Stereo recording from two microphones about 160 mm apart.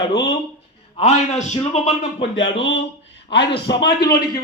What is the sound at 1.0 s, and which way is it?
A man's voice, 45° left (ahead or behind).